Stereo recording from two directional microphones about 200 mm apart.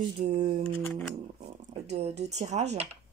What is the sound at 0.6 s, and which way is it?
Speech, 5° left (ahead or behind).